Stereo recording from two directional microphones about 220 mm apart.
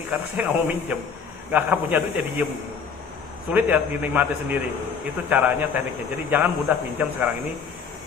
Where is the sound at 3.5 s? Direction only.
5° right (ahead or behind).